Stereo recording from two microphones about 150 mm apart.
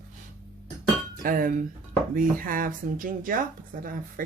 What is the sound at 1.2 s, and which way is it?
Speech, 70° right (ahead or behind).